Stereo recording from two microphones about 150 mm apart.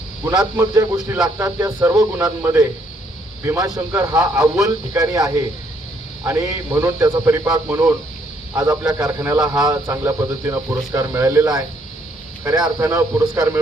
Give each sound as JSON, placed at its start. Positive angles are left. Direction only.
{"t": 0.5, "sound": "a man's voice", "side_deg": -20}